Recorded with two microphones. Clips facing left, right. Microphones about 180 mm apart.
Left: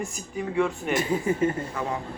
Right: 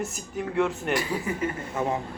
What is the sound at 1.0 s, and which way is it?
Speech, 25° left (ahead or behind).